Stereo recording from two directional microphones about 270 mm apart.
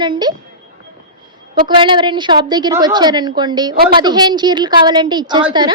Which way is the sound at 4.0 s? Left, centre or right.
Centre.